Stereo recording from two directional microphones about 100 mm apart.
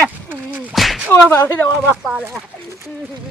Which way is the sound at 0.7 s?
Centre (ahead or behind).